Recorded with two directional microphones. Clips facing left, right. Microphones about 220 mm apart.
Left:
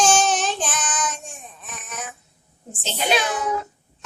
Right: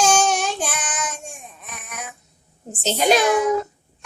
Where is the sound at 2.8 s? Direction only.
45° right (ahead or behind).